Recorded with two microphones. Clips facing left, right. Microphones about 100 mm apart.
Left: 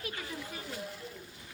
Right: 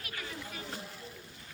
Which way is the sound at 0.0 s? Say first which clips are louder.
Left 2 dB; 25° left (ahead or behind).